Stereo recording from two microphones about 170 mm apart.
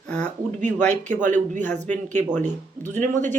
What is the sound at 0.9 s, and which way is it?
Speech, 45° right (ahead or behind).